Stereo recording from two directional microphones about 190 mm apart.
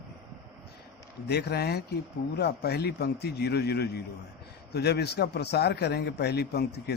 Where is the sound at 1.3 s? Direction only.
60° left (ahead or behind).